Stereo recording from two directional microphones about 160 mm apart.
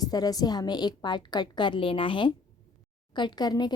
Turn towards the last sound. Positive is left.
turn(degrees=25)  # may be behind; listen again after turning